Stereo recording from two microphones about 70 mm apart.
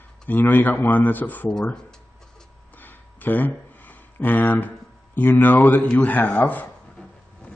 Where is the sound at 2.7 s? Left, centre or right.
Left.